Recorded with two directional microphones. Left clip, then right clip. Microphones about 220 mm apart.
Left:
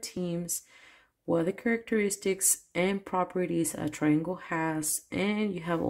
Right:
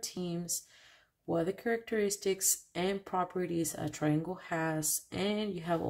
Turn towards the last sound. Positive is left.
turn(degrees=25)  # may be behind; listen again after turning